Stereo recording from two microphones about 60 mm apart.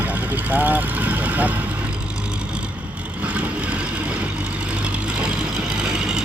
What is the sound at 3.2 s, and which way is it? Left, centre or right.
Vehicle, right.